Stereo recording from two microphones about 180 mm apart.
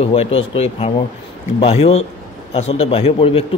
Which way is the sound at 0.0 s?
30° left (ahead or behind).